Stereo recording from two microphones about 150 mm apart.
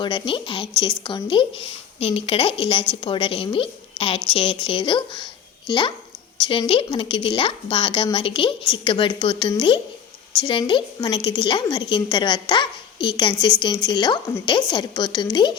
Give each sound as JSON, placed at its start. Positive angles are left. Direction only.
{"t": 0.0, "sound": "a woman's voice", "side_deg": 30}